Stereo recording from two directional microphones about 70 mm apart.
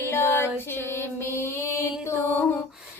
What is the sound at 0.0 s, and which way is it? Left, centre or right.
Music, left.